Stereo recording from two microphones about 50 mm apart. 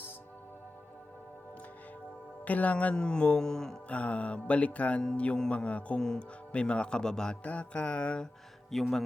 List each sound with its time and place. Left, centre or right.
2.4 s speech: left
2.9 s speech: centre
3.8 s music: left
7.4 s music: left
8.7 s speech: centre